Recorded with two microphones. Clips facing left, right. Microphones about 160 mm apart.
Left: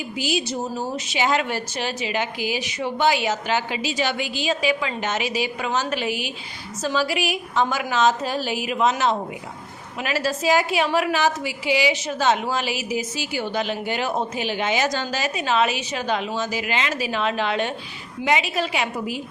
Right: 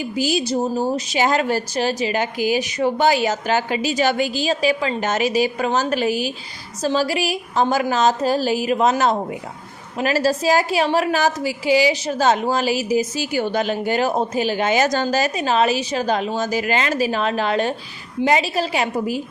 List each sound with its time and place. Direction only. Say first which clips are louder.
0.2 s a woman's voice: right 5 dB; 40° right (ahead or behind)